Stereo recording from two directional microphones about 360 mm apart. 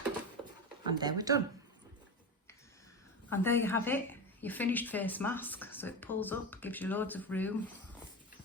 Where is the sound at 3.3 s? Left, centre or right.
Centre.